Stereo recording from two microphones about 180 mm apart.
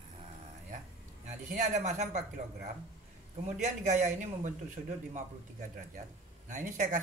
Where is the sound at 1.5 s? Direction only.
40° right (ahead or behind).